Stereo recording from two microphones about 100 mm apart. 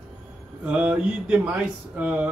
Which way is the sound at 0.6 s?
10° right (ahead or behind).